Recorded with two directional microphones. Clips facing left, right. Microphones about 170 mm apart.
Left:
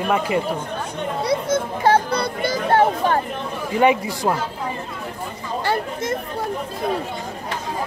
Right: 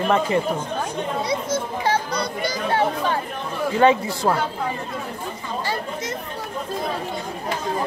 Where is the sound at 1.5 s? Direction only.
55° left (ahead or behind).